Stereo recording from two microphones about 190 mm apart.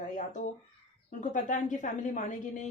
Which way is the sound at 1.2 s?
40° left (ahead or behind).